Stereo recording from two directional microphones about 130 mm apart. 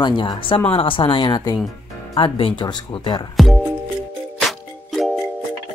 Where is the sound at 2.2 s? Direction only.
45° left (ahead or behind).